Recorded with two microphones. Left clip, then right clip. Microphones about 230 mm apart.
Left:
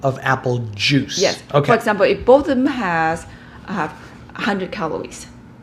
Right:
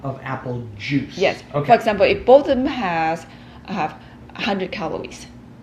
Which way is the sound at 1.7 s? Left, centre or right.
Left.